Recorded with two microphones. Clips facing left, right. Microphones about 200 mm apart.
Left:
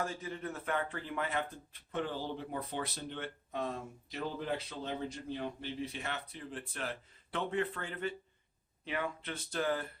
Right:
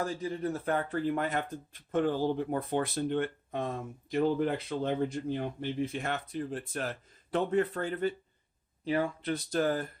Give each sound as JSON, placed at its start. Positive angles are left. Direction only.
{"t": 0.0, "sound": "speech", "side_deg": -35}